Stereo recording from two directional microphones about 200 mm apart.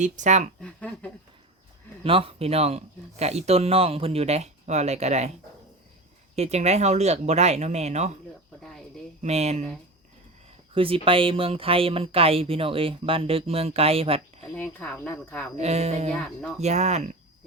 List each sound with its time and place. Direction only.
0.0 s speech: 35° right (ahead or behind)
0.6 s speech: 5° left (ahead or behind)
2.0 s speech: 25° right (ahead or behind)
6.3 s speech: 30° right (ahead or behind)
9.2 s speech: 35° right (ahead or behind)
10.8 s speech: 25° right (ahead or behind)
14.5 s speech: 5° left (ahead or behind)
15.5 s speech: 35° right (ahead or behind)
16.2 s speech: centre (ahead or behind)
16.6 s speech: 35° right (ahead or behind)